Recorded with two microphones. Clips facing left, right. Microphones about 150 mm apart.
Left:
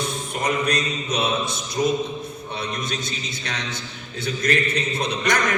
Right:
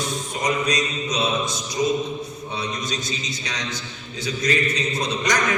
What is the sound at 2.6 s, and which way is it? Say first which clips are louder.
A man's voice: even; 55° left (ahead or behind).